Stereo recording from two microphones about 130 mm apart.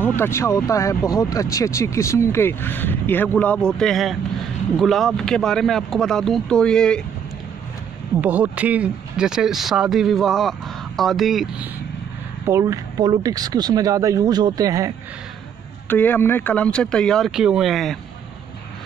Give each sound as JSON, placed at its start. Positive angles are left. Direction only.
{"t": 0.0, "sound": "speech", "side_deg": 20}
{"t": 8.2, "sound": "speech", "side_deg": -10}
{"t": 12.4, "sound": "speech", "side_deg": -25}
{"t": 15.9, "sound": "speech", "side_deg": 15}